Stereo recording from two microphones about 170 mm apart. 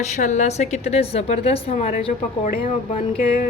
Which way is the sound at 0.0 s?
45° left (ahead or behind).